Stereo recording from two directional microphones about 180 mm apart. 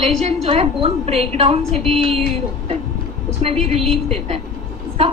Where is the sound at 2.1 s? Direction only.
35° right (ahead or behind).